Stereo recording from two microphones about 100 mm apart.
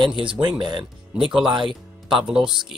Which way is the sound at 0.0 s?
55° right (ahead or behind).